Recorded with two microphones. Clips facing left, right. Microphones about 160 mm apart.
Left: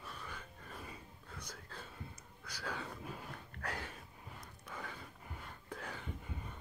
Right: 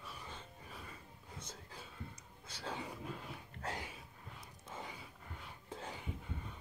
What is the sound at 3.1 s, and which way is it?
Dog, centre (ahead or behind).